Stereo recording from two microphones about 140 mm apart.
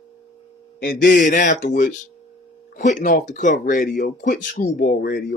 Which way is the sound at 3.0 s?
75° left (ahead or behind).